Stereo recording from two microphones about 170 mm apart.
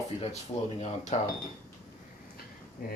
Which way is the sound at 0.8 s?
40° left (ahead or behind).